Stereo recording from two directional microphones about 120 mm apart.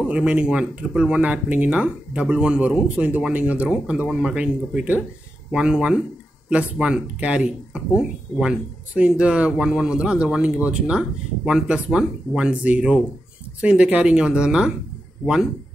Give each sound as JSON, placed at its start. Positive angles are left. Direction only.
{"t": 0.1, "sound": "speech", "side_deg": -10}